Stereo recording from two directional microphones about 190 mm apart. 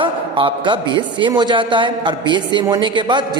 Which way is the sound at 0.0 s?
25° right (ahead or behind).